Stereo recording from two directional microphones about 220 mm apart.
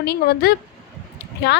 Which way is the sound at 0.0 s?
45° left (ahead or behind).